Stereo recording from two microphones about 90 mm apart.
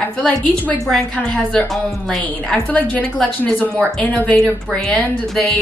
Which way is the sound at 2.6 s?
15° left (ahead or behind).